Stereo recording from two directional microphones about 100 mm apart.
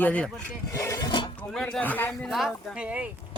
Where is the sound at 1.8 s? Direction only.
20° left (ahead or behind).